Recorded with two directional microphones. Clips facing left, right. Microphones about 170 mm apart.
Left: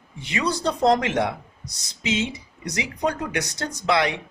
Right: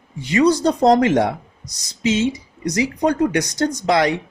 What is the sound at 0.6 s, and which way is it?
Speech, 35° right (ahead or behind).